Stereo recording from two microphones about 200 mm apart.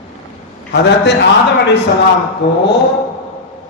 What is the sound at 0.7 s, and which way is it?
A man's voice, 60° left (ahead or behind).